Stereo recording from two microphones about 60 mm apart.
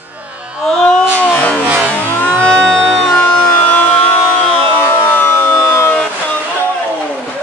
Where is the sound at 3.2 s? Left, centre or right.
Left.